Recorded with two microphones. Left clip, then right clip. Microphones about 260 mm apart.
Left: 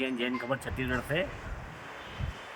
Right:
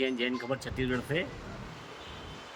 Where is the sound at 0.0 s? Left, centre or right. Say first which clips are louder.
Right 1 dB; centre.